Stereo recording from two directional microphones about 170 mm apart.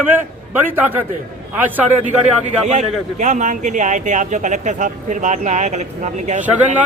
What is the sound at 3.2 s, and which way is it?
Speech, 45° right (ahead or behind).